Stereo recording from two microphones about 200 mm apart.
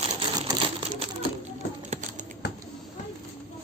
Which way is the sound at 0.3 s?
20° right (ahead or behind).